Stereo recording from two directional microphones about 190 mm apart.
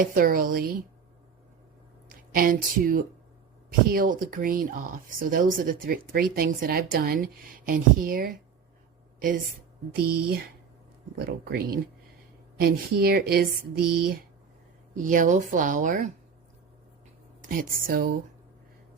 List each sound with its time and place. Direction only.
0.0 s speech: 45° right (ahead or behind)
2.3 s speech: 50° right (ahead or behind)
9.9 s speech: 55° right (ahead or behind)
17.5 s speech: 50° right (ahead or behind)